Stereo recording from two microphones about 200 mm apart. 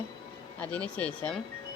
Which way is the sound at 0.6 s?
5° left (ahead or behind).